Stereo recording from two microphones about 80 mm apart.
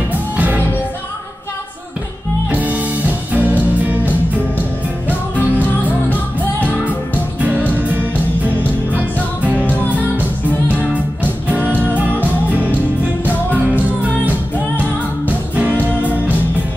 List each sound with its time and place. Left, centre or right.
2.5 s music: centre
9.7 s music: centre
10.7 s music: centre
15.2 s music: centre